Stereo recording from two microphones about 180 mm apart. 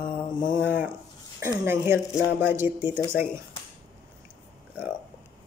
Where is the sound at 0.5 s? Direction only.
10° right (ahead or behind).